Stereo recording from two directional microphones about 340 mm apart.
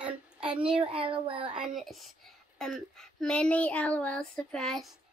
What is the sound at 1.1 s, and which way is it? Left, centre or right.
Speech, centre.